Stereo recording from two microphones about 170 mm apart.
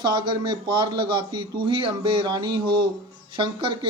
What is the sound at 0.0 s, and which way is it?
Speech, 25° right (ahead or behind).